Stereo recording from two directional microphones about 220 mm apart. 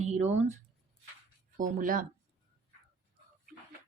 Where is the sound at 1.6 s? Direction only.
40° right (ahead or behind).